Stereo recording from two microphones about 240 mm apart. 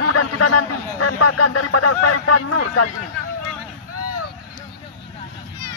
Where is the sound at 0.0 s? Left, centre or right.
Left.